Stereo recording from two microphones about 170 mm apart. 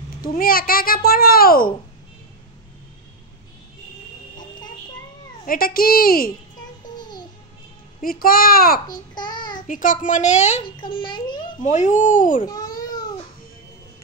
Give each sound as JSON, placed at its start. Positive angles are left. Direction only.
{"t": 0.2, "sound": "a child's voice", "side_deg": 60}
{"t": 4.4, "sound": "a sound", "side_deg": 25}
{"t": 5.5, "sound": "a child's voice", "side_deg": 60}
{"t": 8.0, "sound": "a child's voice", "side_deg": 60}
{"t": 8.8, "sound": "babbling", "side_deg": 25}
{"t": 9.7, "sound": "a woman's voice", "side_deg": 50}
{"t": 11.0, "sound": "a child's voice", "side_deg": 30}
{"t": 11.6, "sound": "a woman's voice", "side_deg": 45}
{"t": 12.4, "sound": "baby cry", "side_deg": 25}